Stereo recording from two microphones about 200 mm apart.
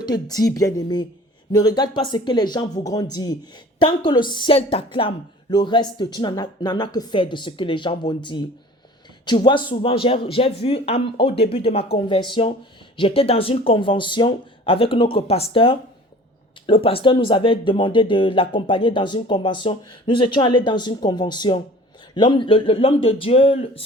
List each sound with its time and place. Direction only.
0.0 s speech: 20° left (ahead or behind)